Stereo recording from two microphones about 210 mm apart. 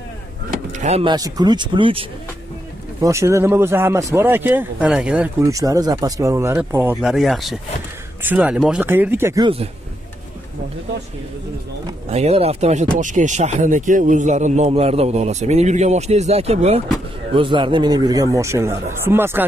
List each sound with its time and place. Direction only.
0.5 s vehicle: 35° right (ahead or behind)
1.1 s speech: 15° right (ahead or behind)
3.0 s speech: 15° right (ahead or behind)
5.5 s speech: 15° right (ahead or behind)
7.0 s speech: centre (ahead or behind)
12.1 s speech: 30° right (ahead or behind); by 19.4 s 10° right (ahead or behind)